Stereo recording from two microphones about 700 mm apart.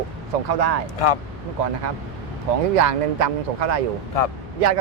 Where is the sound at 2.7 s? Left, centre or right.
Right.